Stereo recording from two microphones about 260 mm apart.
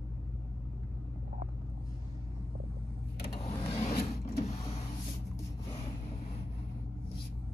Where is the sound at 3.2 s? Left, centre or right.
Left.